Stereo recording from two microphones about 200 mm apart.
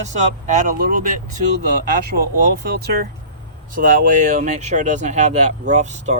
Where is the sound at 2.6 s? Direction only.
50° right (ahead or behind).